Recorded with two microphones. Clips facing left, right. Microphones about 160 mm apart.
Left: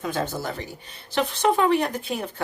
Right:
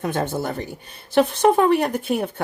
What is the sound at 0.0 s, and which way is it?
Speech, 60° right (ahead or behind).